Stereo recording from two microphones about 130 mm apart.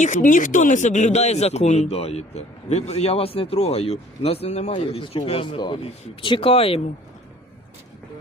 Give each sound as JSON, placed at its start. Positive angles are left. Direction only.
{"t": 0.0, "sound": "speech", "side_deg": 80}